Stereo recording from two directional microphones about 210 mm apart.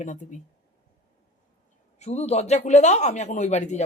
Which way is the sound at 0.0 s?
35° left (ahead or behind).